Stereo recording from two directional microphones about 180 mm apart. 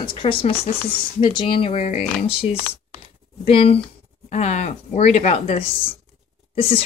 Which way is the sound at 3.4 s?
30° left (ahead or behind).